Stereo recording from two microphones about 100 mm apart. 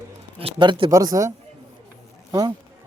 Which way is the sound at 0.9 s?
35° right (ahead or behind).